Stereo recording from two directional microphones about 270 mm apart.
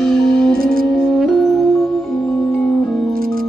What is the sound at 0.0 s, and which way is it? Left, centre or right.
Music, centre.